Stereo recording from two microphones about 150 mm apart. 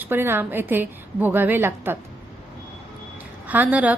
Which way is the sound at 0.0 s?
15° right (ahead or behind).